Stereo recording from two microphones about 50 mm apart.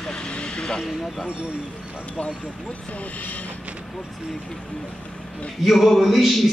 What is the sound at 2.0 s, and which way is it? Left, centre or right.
Speech, left.